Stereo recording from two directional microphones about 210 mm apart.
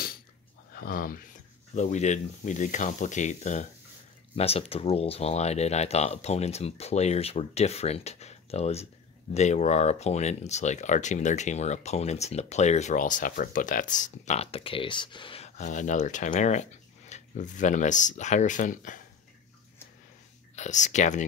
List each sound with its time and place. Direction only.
0.7 s speech: 45° left (ahead or behind)
20.5 s speech: 35° left (ahead or behind)